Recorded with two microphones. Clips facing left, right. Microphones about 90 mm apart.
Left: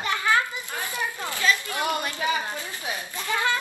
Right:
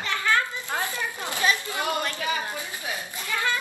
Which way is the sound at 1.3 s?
20° right (ahead or behind).